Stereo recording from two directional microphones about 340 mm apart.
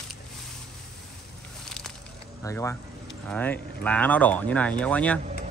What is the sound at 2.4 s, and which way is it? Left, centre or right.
Speech, centre.